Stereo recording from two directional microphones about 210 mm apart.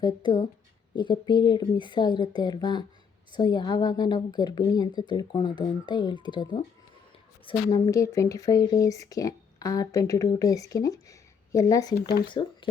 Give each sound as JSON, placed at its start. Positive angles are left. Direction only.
{"t": 0.0, "sound": "a woman's voice", "side_deg": 20}
{"t": 11.9, "sound": "speech", "side_deg": 50}
{"t": 12.3, "sound": "speech", "side_deg": 25}